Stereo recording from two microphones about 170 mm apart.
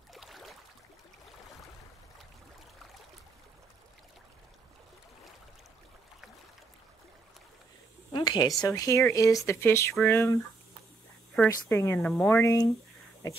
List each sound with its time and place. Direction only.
0.1 s a sound: centre (ahead or behind)
8.1 s a woman's voice: 25° left (ahead or behind)
11.4 s a woman's voice: 15° left (ahead or behind)